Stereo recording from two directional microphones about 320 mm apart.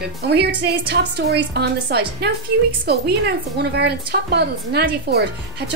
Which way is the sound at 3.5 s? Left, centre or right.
Right.